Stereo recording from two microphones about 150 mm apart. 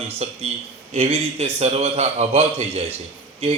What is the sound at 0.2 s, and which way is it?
A man's voice, 45° right (ahead or behind).